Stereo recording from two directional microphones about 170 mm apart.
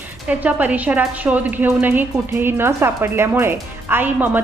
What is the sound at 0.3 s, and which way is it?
A woman's voice, 10° right (ahead or behind).